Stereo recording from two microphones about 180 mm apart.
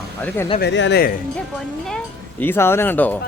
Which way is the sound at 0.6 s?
80° left.